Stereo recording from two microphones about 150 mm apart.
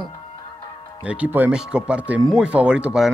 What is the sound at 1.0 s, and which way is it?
Speech, 10° right (ahead or behind).